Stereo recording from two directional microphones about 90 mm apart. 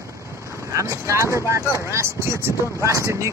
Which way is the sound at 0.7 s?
35° right (ahead or behind).